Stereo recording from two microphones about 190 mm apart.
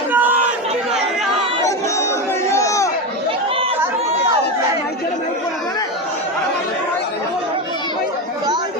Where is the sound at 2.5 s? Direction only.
15° left (ahead or behind).